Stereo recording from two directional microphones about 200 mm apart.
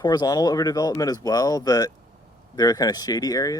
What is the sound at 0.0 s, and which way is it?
Speech, 20° left (ahead or behind).